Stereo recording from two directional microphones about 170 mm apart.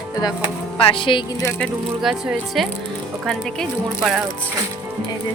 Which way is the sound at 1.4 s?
15° left (ahead or behind).